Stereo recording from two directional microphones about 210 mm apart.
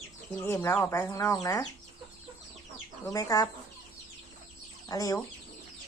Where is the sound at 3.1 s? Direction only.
15° left (ahead or behind).